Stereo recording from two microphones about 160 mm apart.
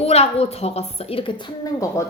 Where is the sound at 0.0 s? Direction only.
40° left (ahead or behind).